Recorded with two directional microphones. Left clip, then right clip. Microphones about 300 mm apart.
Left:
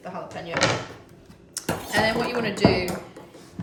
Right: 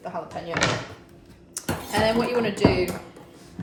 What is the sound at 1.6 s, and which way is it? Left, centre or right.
Music, centre.